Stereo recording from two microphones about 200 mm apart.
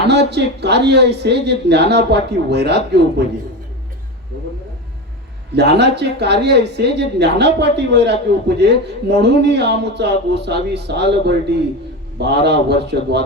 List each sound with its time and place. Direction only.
0.1 s speech: 55° right (ahead or behind)
5.5 s speech: 55° right (ahead or behind)